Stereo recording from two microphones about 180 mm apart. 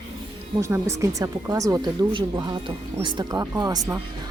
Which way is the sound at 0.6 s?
15° right (ahead or behind).